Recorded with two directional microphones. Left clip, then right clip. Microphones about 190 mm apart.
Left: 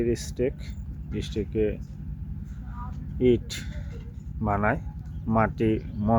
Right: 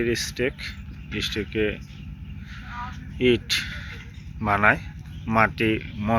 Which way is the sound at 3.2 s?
15° left (ahead or behind).